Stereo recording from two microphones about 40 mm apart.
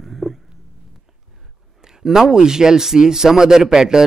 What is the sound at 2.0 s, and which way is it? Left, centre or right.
Speech, centre.